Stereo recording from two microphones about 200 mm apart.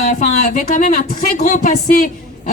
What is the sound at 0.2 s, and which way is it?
Speech, 40° left (ahead or behind).